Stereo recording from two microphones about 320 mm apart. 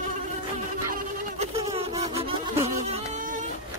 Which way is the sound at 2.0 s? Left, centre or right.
Centre.